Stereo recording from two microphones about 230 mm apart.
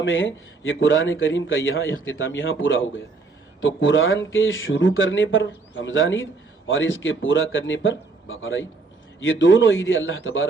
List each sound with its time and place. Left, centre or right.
0.0 s a man's voice: left